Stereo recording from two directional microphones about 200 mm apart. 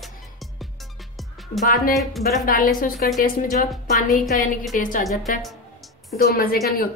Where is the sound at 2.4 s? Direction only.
45° left (ahead or behind).